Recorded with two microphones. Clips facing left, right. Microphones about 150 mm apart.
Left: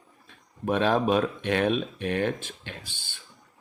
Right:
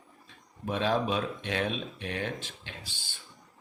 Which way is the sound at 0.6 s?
55° left (ahead or behind).